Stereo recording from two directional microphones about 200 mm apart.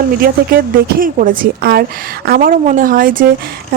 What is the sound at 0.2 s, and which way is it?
Speech, 45° right (ahead or behind).